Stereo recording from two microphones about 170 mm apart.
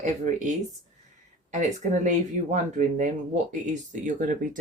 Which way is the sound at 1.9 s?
45° right (ahead or behind).